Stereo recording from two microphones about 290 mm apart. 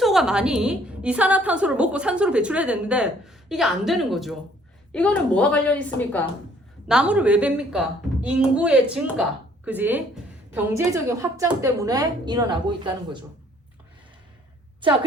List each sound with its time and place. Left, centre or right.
0.0 s a woman's voice: centre
14.8 s a woman's voice: centre